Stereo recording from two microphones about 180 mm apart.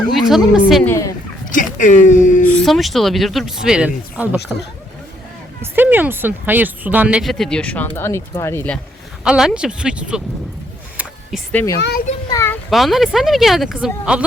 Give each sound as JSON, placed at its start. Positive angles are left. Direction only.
{"t": 0.0, "sound": "speech", "side_deg": 0}
{"t": 0.9, "sound": "speech", "side_deg": 15}
{"t": 1.5, "sound": "speech", "side_deg": 45}
{"t": 2.2, "sound": "a sound", "side_deg": 45}
{"t": 2.5, "sound": "speech", "side_deg": 0}
{"t": 5.7, "sound": "speech", "side_deg": -10}
{"t": 9.2, "sound": "speech", "side_deg": -5}
{"t": 11.5, "sound": "speech", "side_deg": 15}
{"t": 11.8, "sound": "a child's voice", "side_deg": 60}
{"t": 12.3, "sound": "a child's voice", "side_deg": 15}
{"t": 12.7, "sound": "speech", "side_deg": 0}